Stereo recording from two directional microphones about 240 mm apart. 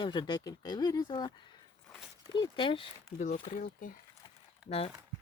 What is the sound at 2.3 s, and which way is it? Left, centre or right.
Speech, centre.